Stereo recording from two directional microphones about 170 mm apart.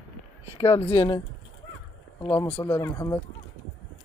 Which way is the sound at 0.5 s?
35° left (ahead or behind).